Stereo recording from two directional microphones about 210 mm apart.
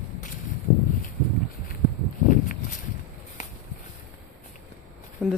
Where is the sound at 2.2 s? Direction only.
40° left (ahead or behind).